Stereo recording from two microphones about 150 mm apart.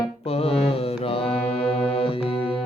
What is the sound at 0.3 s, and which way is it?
Music, 40° left (ahead or behind).